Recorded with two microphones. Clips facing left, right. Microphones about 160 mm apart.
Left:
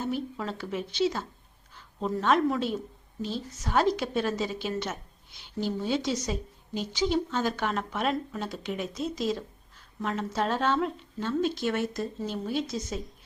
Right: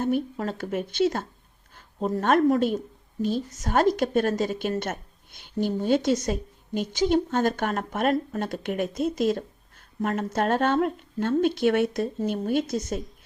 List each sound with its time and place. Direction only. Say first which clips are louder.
0.0 s speech: right 6 dB; 50° right (ahead or behind)